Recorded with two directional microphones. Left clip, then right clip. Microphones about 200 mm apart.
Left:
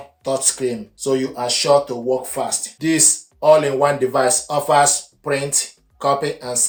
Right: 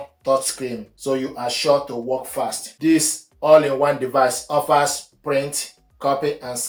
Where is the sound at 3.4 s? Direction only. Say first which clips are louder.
Left 1 dB; 45° left (ahead or behind).